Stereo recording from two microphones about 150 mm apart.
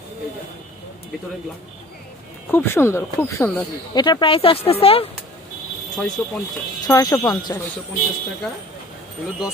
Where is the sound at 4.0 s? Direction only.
30° left (ahead or behind).